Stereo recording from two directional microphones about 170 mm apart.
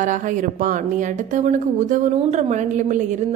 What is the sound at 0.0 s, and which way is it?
A woman's voice, 50° right (ahead or behind).